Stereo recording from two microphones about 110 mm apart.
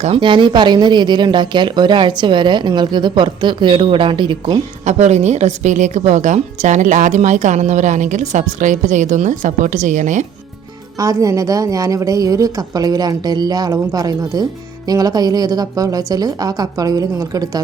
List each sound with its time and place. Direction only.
0.2 s speech: 45° right (ahead or behind)
4.9 s a woman's voice: 90° right
10.9 s a woman's voice: 35° right (ahead or behind)